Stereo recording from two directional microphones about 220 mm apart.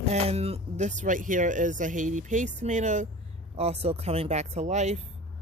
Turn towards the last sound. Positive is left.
turn(degrees=-30)  # may be behind; listen again after turning